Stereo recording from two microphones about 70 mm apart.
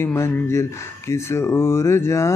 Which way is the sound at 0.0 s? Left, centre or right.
Left.